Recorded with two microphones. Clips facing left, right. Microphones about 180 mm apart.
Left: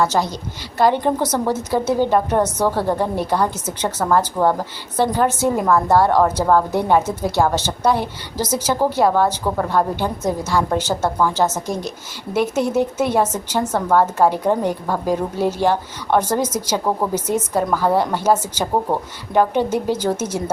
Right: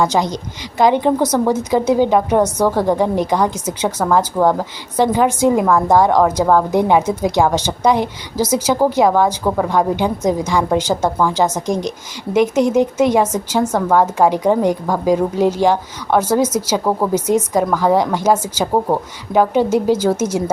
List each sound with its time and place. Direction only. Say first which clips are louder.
0.0 s speech: right 2 dB; 15° right (ahead or behind)